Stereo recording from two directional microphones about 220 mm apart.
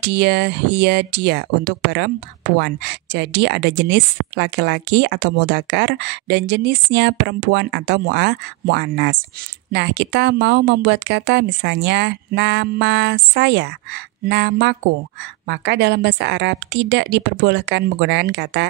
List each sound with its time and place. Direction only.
0.0 s speech: 50° right (ahead or behind)